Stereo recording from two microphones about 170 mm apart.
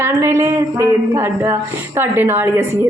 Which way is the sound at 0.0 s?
15° right (ahead or behind).